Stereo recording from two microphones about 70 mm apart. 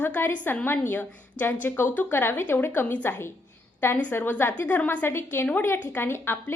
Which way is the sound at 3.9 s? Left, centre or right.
Left.